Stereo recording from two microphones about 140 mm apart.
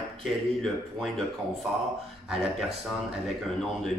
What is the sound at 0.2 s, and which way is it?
Speech, centre (ahead or behind).